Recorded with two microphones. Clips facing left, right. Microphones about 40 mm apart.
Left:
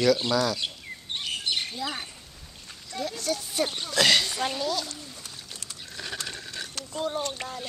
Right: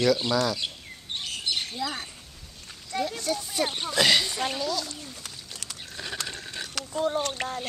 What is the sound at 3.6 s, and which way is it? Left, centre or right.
Speech, centre.